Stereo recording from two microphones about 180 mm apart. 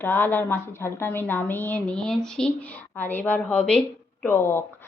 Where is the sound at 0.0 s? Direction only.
10° left (ahead or behind).